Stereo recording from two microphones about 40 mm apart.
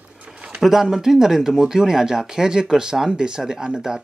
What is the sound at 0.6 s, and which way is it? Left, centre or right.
Speech, centre.